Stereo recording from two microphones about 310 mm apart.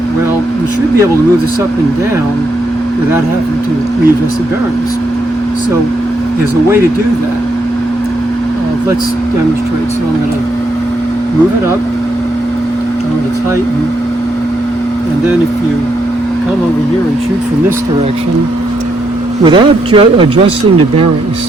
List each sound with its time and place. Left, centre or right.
19.5 s speech: centre